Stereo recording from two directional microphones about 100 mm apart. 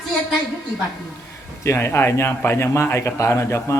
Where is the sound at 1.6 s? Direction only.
25° left (ahead or behind).